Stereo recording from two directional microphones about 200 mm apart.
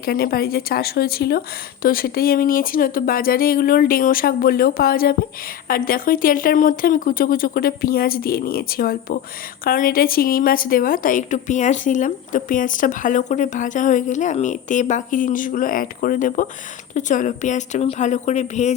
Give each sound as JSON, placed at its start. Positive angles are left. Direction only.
{"t": 0.0, "sound": "a woman's voice", "side_deg": 50}